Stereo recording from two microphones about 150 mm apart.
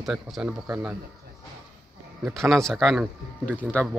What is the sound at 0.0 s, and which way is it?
Speech, centre (ahead or behind).